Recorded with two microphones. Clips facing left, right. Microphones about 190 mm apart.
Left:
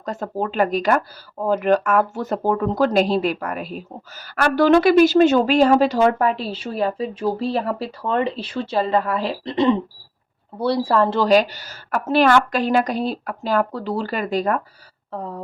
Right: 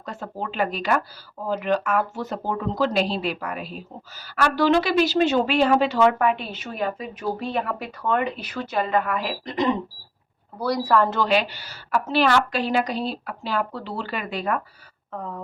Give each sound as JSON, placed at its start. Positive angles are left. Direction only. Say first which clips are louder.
{"t": 0.0, "sound": "a woman's voice", "louder": "left 7 dB", "side_deg": 45}